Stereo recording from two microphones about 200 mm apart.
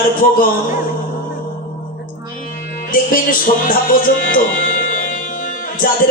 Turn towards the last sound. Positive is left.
turn(degrees=45)  # may be behind; listen again after turning